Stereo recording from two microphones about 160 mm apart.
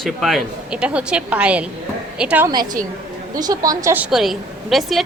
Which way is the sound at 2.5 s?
25° right (ahead or behind).